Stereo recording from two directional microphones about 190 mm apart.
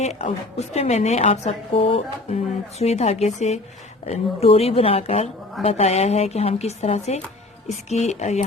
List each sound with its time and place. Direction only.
0.0 s a woman's voice: 35° left (ahead or behind)